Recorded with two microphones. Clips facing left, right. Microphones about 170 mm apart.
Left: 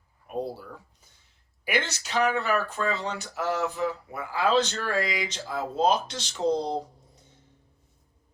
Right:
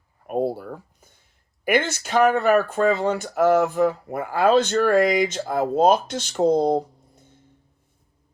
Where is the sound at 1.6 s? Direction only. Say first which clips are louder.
Right 8 dB; 50° right (ahead or behind).